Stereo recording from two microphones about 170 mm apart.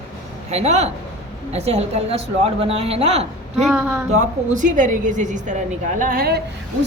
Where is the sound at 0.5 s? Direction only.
40° right (ahead or behind).